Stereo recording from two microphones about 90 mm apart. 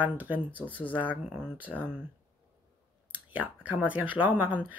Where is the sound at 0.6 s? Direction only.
20° left (ahead or behind).